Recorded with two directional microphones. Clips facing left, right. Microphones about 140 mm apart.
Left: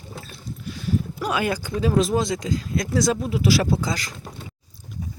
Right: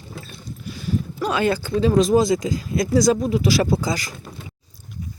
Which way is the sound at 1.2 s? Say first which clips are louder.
Right 6 dB; 10° left (ahead or behind).